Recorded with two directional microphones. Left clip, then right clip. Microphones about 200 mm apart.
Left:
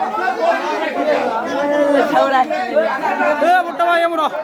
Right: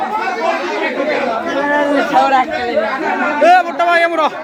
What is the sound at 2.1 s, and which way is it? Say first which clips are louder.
Chatter: right 2 dB; 20° left (ahead or behind).